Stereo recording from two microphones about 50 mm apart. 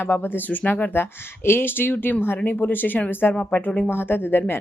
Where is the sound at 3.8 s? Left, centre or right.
Left.